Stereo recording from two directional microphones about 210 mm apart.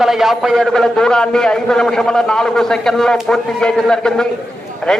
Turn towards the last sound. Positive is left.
turn(degrees=5)  # may be behind; listen again after turning